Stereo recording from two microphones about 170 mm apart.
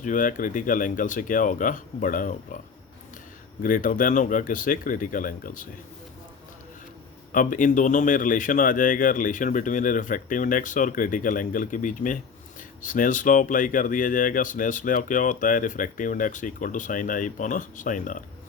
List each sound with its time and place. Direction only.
0.0 s speech: 50° left (ahead or behind)
3.6 s speech: 50° left (ahead or behind)
7.3 s speech: 50° left (ahead or behind)